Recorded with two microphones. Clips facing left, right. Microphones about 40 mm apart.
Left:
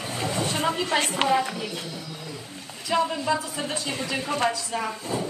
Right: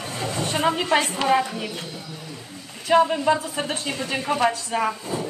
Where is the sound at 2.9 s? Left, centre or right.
Right.